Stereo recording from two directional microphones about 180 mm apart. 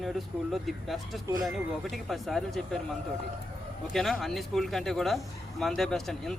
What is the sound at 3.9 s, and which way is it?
Speech, centre (ahead or behind).